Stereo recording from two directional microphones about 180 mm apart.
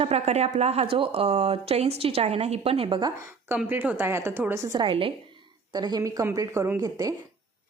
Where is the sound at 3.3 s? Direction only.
10° right (ahead or behind).